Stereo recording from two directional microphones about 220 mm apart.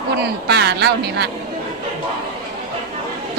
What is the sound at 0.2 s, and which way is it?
A woman's voice, 50° right (ahead or behind).